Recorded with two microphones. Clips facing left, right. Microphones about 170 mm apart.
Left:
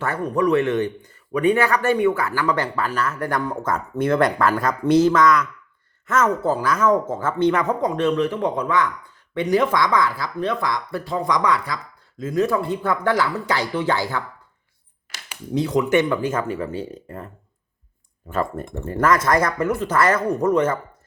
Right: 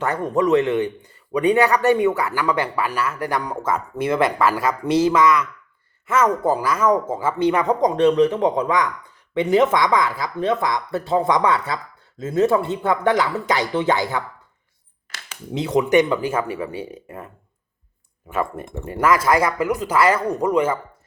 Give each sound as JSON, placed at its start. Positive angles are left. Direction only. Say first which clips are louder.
{"t": 0.0, "sound": "speech", "louder": "right 1 dB", "side_deg": -20}
{"t": 7.7, "sound": "speech", "louder": "right 3 dB", "side_deg": -35}
{"t": 8.0, "sound": "speech", "louder": "right 5 dB", "side_deg": -20}
{"t": 15.5, "sound": "speech", "louder": "right 2 dB", "side_deg": -20}
{"t": 18.3, "sound": "speech", "louder": "even", "side_deg": -5}